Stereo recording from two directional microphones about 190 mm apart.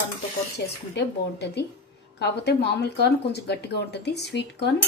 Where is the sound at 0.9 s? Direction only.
65° left (ahead or behind).